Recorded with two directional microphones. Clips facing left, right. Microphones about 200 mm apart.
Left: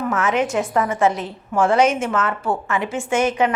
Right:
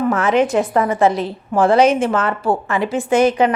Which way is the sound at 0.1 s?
35° right (ahead or behind).